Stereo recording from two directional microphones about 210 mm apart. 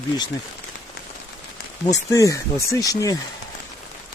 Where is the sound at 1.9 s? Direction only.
15° left (ahead or behind).